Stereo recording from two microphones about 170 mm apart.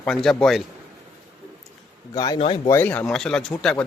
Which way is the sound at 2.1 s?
25° left (ahead or behind).